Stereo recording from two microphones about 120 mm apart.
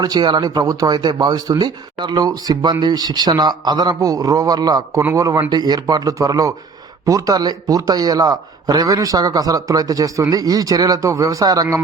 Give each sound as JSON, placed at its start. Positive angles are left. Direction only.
{"t": 0.0, "sound": "speech", "side_deg": -35}